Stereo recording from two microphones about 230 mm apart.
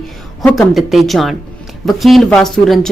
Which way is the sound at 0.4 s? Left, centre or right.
Centre.